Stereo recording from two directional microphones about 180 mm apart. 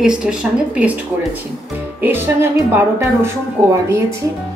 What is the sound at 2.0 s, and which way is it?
Speech, 10° right (ahead or behind).